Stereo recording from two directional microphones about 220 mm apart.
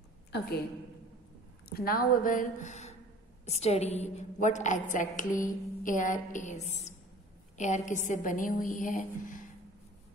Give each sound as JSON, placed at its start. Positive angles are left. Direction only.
{"t": 1.7, "sound": "a woman's voice", "side_deg": 45}